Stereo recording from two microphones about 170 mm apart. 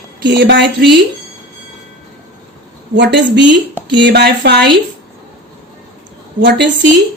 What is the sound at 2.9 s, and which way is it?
A woman's voice, 90° right.